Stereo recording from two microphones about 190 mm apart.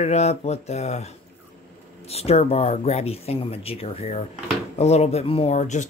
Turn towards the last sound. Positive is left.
turn(degrees=40)  # may be behind; listen again after turning